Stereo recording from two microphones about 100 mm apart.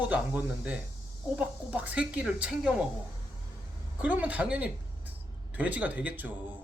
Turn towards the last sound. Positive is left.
turn(degrees=-15)  # may be behind; listen again after turning